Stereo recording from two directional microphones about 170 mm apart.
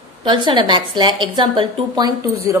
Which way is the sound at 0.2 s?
30° right (ahead or behind).